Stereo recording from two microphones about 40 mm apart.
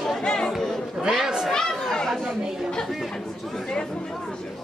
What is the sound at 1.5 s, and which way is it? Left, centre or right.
Chatter, centre.